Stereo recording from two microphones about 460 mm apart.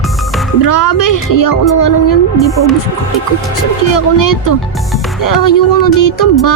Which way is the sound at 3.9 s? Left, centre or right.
Left.